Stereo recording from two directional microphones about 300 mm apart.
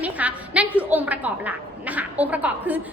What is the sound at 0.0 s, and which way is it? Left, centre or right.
A woman's voice, centre.